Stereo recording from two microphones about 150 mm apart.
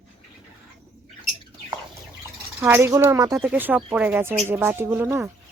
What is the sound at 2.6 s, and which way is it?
Speech, 15° right (ahead or behind).